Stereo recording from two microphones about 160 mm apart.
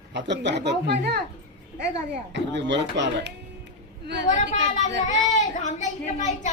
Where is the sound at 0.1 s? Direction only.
90° right.